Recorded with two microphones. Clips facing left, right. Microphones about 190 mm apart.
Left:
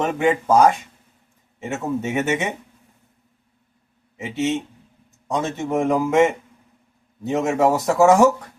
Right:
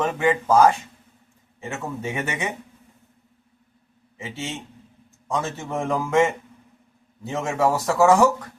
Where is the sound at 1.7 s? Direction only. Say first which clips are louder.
Left 6 dB; 20° left (ahead or behind).